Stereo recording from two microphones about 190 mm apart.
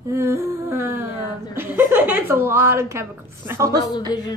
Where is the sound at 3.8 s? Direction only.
20° left (ahead or behind).